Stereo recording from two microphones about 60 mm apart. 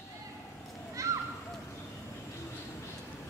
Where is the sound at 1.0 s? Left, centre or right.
Right.